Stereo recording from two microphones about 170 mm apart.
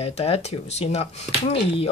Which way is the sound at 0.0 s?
35° left (ahead or behind).